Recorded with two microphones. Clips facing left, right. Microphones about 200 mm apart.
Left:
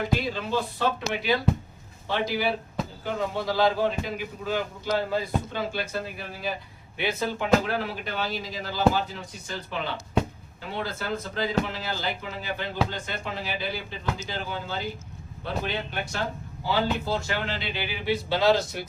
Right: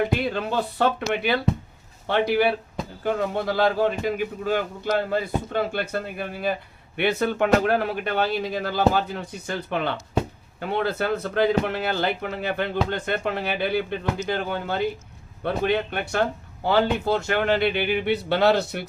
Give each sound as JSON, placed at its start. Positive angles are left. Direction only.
{"t": 0.3, "sound": "a man's voice", "side_deg": -60}